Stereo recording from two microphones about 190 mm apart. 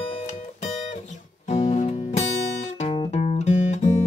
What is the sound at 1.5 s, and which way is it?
Music, 35° left (ahead or behind).